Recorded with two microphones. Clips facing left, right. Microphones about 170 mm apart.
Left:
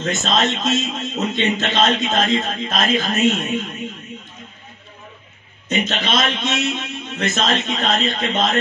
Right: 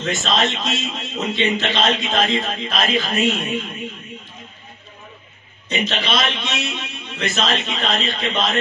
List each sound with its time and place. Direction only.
0.0 s a man's voice: 45° left (ahead or behind)
5.7 s a man's voice: 45° left (ahead or behind)